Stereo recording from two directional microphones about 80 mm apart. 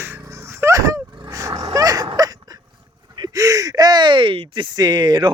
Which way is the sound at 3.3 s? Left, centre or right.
Right.